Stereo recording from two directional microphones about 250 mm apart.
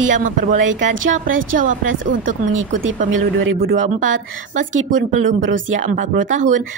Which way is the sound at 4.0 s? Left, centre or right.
Right.